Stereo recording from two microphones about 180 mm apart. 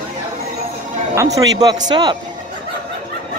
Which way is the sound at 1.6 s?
20° right (ahead or behind).